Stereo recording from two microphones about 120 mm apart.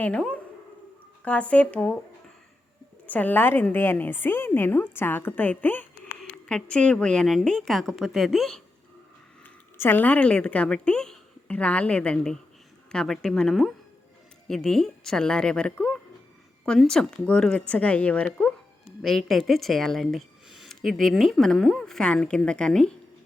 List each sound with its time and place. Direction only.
0.0 s a woman's voice: 10° left (ahead or behind)
3.1 s a woman's voice: 15° left (ahead or behind)
9.7 s a woman's voice: 15° left (ahead or behind)